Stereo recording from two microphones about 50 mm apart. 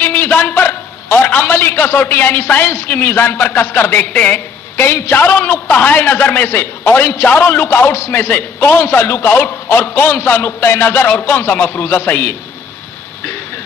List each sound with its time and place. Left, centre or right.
0.0 s a sound: left
1.9 s a man's voice: left
4.8 s a man's voice: left
5.2 s a man's voice: left
12.1 s a man's voice: left